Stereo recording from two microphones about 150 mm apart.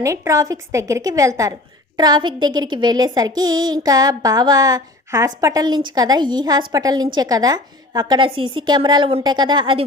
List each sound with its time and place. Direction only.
0.0 s speech: 20° right (ahead or behind)